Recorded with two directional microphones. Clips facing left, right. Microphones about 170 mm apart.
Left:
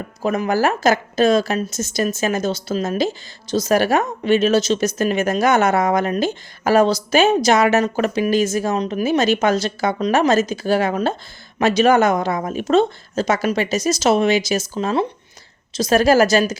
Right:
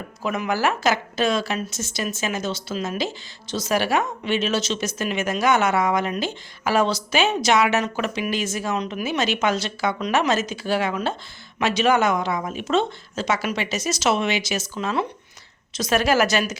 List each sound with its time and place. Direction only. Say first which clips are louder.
0.2 s speech: left 5 dB; 40° left (ahead or behind)